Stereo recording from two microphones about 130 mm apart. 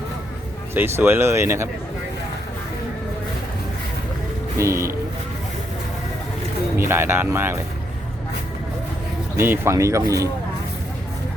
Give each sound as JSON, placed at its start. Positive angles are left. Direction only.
{"t": 0.7, "sound": "speech", "side_deg": -15}
{"t": 4.5, "sound": "speech", "side_deg": -20}
{"t": 6.7, "sound": "speech", "side_deg": -20}
{"t": 9.3, "sound": "speech", "side_deg": -20}